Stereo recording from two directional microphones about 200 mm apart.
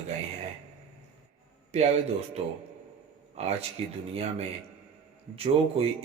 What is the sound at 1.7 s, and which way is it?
Speech, 30° right (ahead or behind).